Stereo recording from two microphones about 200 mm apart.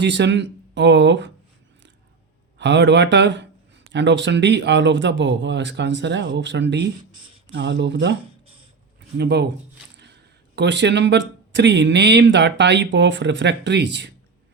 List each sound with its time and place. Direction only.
0.0 s speech: 60° right (ahead or behind)
2.6 s speech: 60° right (ahead or behind)
10.5 s speech: 60° right (ahead or behind)